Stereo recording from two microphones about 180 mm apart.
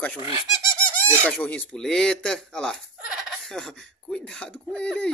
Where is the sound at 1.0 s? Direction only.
10° left (ahead or behind).